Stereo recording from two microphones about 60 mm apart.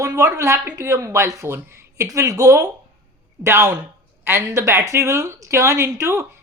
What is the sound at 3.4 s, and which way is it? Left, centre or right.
Speech, right.